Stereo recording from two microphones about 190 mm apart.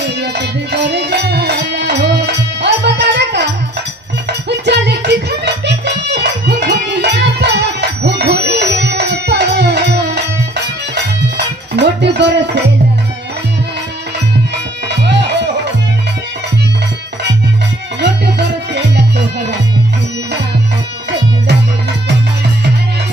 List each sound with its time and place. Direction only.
0.0 s music: 60° right (ahead or behind)
14.9 s music: 65° right (ahead or behind)
18.0 s music: 65° right (ahead or behind)